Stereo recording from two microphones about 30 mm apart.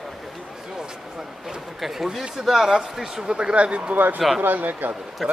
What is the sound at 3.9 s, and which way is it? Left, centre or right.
Speech, right.